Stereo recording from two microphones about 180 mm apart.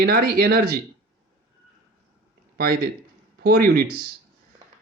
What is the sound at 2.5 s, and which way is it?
Speech, 55° right (ahead or behind).